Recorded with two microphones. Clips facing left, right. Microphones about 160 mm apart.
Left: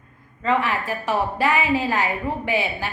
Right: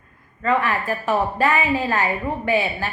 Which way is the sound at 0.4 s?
15° left (ahead or behind).